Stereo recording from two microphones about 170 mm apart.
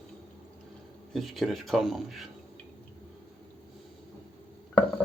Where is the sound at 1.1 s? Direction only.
Centre (ahead or behind).